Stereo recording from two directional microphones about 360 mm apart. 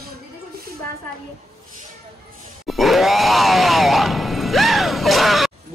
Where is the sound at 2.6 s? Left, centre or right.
Centre.